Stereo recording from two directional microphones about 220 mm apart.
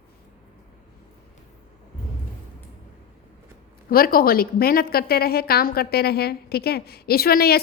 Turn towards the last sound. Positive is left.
turn(degrees=45)  # may be behind; listen again after turning